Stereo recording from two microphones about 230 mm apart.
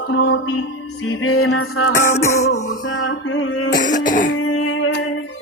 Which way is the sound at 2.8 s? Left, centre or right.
Left.